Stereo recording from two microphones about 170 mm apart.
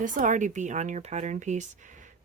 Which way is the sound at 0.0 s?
50° right (ahead or behind).